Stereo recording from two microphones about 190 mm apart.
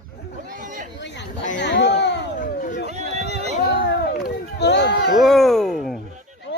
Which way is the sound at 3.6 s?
60° left (ahead or behind).